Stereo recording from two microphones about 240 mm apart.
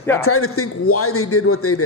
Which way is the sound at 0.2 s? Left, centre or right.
Left.